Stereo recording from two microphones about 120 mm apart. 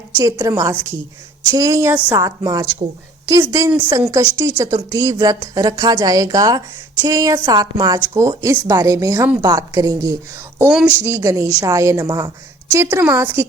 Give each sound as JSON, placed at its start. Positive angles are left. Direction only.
{"t": 0.2, "sound": "a woman's voice", "side_deg": -25}
{"t": 1.5, "sound": "a woman's voice", "side_deg": -30}
{"t": 4.2, "sound": "a woman's voice", "side_deg": -40}
{"t": 9.4, "sound": "a woman's voice", "side_deg": -30}
{"t": 10.7, "sound": "speech", "side_deg": -5}
{"t": 11.0, "sound": "a woman's voice", "side_deg": -25}